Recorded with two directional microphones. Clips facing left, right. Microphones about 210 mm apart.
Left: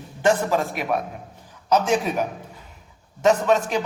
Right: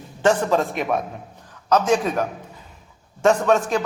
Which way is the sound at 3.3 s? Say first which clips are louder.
Right 1 dB; 5° left (ahead or behind).